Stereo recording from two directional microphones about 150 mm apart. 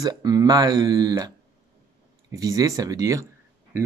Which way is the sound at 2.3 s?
25° right (ahead or behind).